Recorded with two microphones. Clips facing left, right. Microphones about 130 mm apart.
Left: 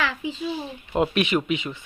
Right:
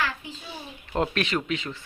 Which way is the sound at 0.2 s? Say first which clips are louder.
Left 11 dB; 90° left.